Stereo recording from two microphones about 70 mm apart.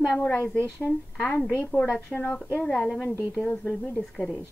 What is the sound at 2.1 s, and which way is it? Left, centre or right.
Speech, centre.